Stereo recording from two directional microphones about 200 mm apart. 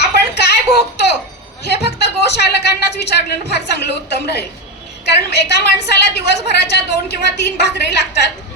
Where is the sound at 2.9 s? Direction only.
55° left (ahead or behind).